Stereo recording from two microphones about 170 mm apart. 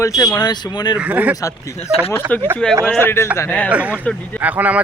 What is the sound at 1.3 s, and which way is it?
Speech, 20° left (ahead or behind).